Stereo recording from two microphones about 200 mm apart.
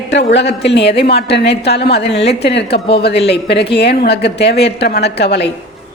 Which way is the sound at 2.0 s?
30° left (ahead or behind).